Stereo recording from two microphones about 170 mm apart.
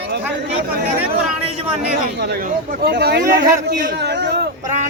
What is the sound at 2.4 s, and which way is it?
Speech, 60° right (ahead or behind).